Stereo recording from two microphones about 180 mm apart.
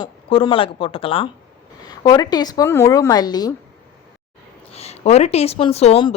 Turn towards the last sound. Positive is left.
turn(degrees=35)  # may be behind; listen again after turning